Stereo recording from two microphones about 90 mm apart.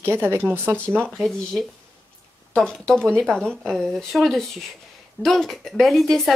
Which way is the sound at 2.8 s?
10° left (ahead or behind).